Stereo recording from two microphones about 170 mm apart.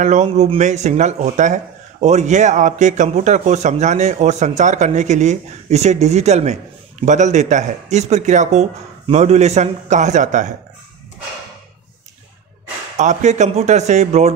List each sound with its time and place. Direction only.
0.0 s speech: 40° right (ahead or behind)
12.9 s speech: 45° right (ahead or behind)